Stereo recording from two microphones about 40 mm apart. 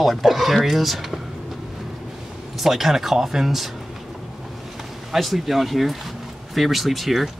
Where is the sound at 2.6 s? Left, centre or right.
Centre.